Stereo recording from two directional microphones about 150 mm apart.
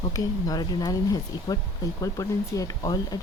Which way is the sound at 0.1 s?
25° left (ahead or behind).